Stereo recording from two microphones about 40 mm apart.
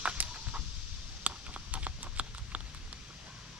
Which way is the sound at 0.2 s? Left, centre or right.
Right.